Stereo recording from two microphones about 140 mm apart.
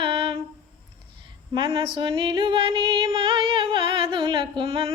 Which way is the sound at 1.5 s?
40° right (ahead or behind).